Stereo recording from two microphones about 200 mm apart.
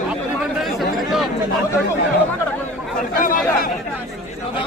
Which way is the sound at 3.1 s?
45° left (ahead or behind).